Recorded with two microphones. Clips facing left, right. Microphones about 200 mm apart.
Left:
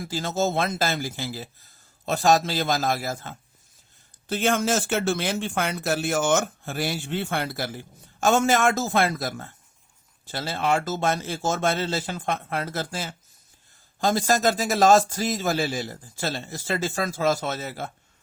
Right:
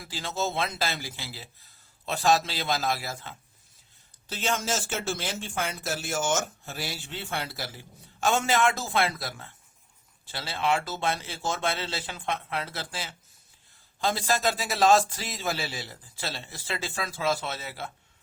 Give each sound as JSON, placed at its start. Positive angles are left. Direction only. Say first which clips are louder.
{"t": 0.0, "sound": "a man's voice", "louder": "left 6 dB", "side_deg": 45}